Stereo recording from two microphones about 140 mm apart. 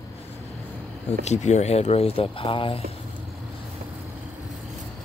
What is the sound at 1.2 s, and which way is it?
Speech, 55° left (ahead or behind).